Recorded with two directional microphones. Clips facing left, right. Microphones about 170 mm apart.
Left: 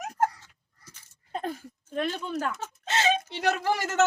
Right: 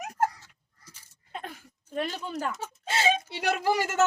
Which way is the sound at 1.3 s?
35° left (ahead or behind).